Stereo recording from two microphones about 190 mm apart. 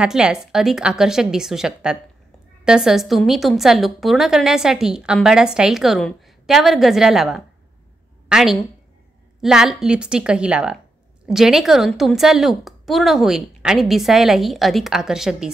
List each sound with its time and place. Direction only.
0.0 s a woman's voice: 5° right (ahead or behind)